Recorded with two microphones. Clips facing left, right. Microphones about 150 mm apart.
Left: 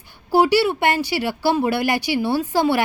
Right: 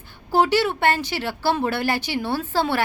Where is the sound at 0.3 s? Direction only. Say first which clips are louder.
Left 3 dB; 10° left (ahead or behind).